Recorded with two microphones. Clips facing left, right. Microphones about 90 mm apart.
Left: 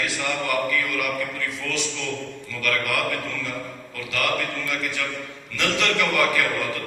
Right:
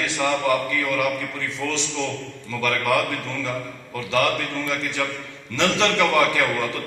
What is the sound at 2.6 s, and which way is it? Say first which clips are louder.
Speech: right 2 dB; 25° right (ahead or behind).